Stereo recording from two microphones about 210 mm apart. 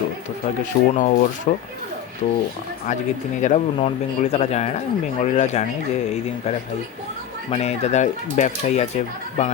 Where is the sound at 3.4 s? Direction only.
35° left (ahead or behind).